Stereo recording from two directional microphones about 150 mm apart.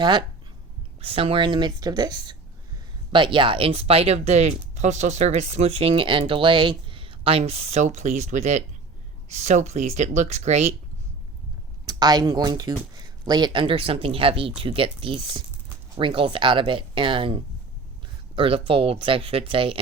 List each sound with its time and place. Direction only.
0.0 s speech: 30° right (ahead or behind); by 10.8 s 45° right (ahead or behind)
11.9 s speech: 25° right (ahead or behind)